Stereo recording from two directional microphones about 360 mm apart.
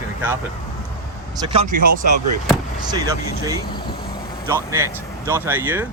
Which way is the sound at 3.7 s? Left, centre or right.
Centre.